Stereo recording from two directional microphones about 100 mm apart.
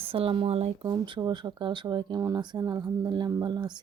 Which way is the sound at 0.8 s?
50° right (ahead or behind).